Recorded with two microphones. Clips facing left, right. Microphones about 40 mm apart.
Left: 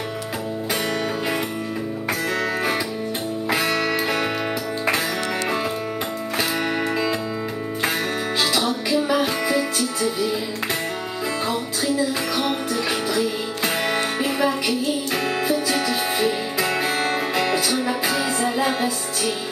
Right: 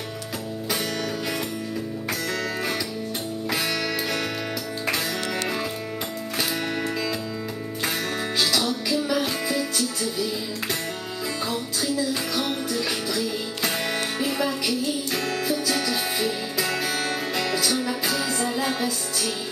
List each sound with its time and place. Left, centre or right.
3.4 s music: centre
8.4 s music: centre
11.8 s music: centre